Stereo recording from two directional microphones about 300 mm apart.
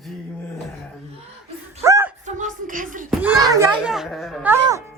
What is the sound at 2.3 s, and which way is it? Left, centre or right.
Speech, right.